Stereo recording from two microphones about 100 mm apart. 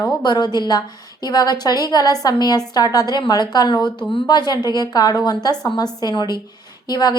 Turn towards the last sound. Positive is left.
turn(degrees=40)  # may be behind; listen again after turning